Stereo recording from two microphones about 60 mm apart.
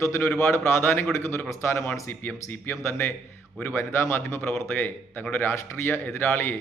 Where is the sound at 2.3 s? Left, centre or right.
Left.